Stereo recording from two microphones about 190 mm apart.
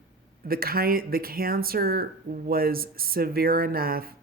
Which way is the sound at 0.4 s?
50° right (ahead or behind).